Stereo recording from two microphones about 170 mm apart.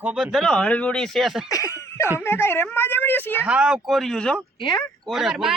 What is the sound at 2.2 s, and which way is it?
A woman's voice, 15° left (ahead or behind).